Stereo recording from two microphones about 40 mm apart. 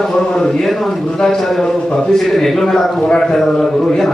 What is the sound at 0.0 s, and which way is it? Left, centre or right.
A man's voice, centre.